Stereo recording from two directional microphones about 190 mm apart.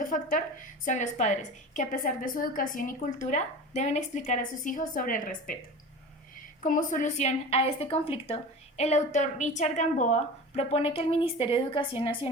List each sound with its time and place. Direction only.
0.0 s a woman's voice: 45° left (ahead or behind)
6.6 s a woman's voice: 40° left (ahead or behind)